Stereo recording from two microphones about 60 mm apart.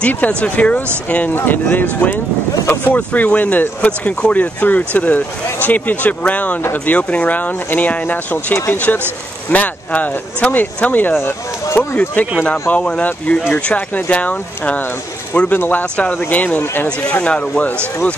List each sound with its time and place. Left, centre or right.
0.0 s speech: left
1.3 s speech: left
3.0 s speech: centre
11.7 s speech: left
12.4 s speech: left
15.8 s speech: left